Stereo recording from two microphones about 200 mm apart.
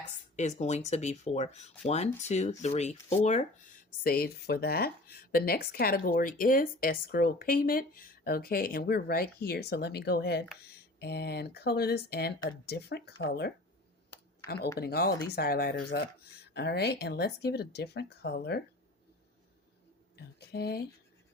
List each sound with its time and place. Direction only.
0.3 s speech: 35° left (ahead or behind); by 18.6 s 55° left (ahead or behind)
20.1 s speech: 50° left (ahead or behind)